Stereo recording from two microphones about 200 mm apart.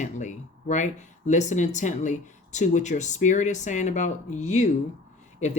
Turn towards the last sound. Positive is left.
turn(degrees=35)  # may be behind; listen again after turning